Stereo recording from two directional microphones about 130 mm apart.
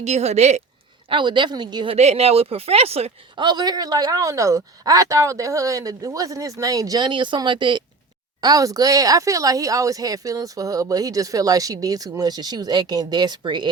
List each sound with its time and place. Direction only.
0.0 s speech: 60° right (ahead or behind)
1.1 s a woman's voice: 35° right (ahead or behind)
2.0 s speech: 55° right (ahead or behind)
3.4 s speech: 30° right (ahead or behind)